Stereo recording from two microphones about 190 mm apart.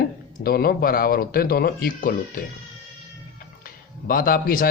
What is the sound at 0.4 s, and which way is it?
Speech, 50° left (ahead or behind).